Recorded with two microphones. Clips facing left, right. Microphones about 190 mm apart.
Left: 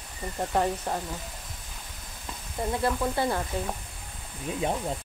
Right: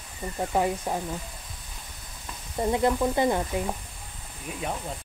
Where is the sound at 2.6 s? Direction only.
20° right (ahead or behind).